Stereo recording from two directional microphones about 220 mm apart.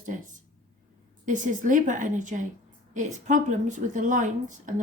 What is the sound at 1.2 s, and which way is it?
A woman's voice, 35° right (ahead or behind).